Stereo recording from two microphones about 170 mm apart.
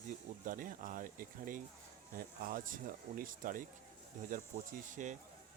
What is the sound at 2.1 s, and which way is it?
Speech, 55° right (ahead or behind).